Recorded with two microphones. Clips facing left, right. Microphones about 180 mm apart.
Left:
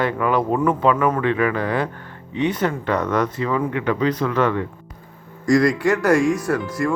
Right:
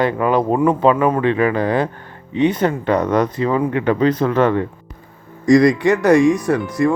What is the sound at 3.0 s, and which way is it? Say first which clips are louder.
Speech: right 4 dB; 35° right (ahead or behind).